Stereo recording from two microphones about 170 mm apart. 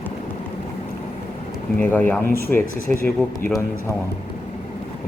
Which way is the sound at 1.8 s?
10° left (ahead or behind).